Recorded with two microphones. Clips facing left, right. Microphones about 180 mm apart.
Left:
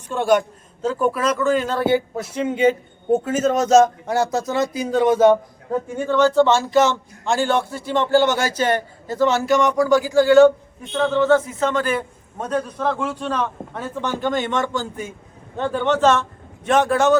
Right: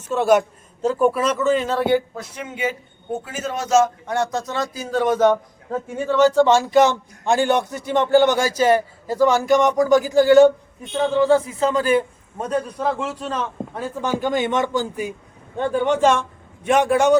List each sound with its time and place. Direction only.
0.1 s speech: 5° right (ahead or behind)
2.1 s speech: 30° left (ahead or behind)
3.2 s a man's voice: 40° left (ahead or behind)
4.3 s speech: 5° left (ahead or behind)
4.5 s a man's voice: 20° left (ahead or behind)
6.1 s speech: 10° right (ahead or behind)
11.3 s speech: 35° right (ahead or behind)
12.4 s speech: 10° right (ahead or behind)